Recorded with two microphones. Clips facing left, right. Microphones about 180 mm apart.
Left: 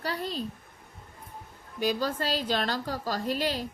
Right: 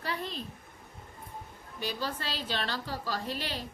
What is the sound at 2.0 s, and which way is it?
A woman's voice, 45° left (ahead or behind).